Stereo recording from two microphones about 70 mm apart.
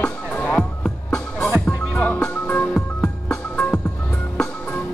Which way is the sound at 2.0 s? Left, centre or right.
Centre.